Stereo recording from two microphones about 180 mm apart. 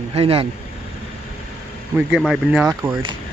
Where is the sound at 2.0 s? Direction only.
5° right (ahead or behind).